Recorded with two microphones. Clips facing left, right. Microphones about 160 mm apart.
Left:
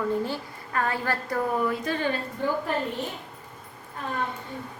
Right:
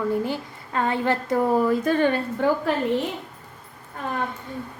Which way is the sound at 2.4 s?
75° right (ahead or behind).